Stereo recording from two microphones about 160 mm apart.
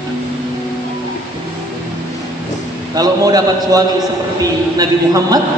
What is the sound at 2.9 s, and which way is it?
A man's voice, 25° right (ahead or behind).